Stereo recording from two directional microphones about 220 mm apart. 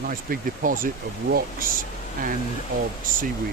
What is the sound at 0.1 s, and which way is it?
Speech, 40° right (ahead or behind).